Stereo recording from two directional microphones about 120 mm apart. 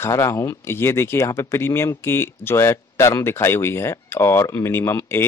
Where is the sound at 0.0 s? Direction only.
20° left (ahead or behind).